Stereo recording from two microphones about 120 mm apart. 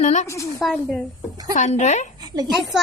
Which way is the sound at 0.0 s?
75° left (ahead or behind).